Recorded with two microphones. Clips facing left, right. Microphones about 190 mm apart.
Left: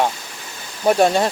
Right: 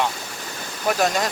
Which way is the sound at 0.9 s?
30° left (ahead or behind).